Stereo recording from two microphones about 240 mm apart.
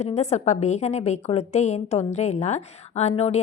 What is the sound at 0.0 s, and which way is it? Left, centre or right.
A woman's voice, left.